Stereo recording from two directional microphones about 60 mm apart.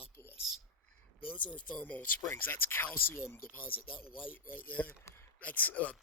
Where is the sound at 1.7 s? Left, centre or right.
Left.